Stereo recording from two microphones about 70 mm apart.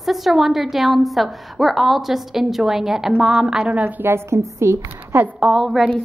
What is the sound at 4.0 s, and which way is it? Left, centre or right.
A woman's voice, right.